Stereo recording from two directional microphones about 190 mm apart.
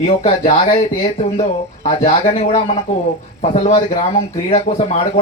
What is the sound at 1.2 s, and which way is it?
Speech, 35° left (ahead or behind).